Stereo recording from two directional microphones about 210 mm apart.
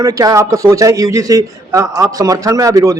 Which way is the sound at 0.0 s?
15° right (ahead or behind).